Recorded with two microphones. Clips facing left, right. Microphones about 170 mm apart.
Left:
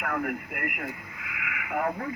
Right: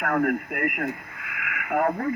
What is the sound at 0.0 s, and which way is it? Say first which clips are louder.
Speech: right 7 dB; 50° right (ahead or behind).